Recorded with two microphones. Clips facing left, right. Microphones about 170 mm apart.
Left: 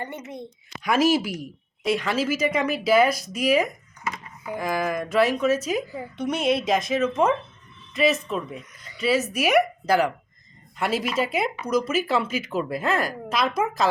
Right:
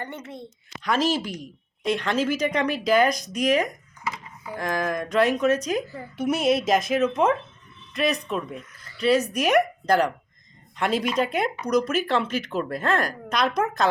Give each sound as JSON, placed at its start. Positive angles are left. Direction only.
{"t": 0.0, "sound": "a woman's voice", "side_deg": 10}
{"t": 6.1, "sound": "speech", "side_deg": -5}
{"t": 8.7, "sound": "a sound", "side_deg": 20}
{"t": 9.0, "sound": "speech", "side_deg": 5}